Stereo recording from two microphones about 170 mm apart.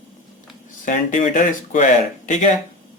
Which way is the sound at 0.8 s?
50° left (ahead or behind).